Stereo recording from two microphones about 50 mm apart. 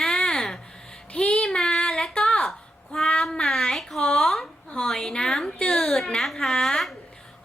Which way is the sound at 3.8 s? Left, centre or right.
Centre.